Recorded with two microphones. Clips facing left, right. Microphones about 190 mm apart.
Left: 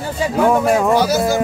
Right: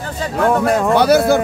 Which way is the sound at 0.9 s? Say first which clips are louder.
Right 3 dB; 60° right (ahead or behind).